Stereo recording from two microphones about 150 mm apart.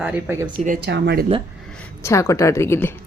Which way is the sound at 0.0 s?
10° right (ahead or behind).